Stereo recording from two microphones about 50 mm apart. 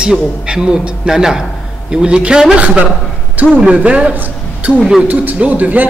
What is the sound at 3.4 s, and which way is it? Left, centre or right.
Speech, right.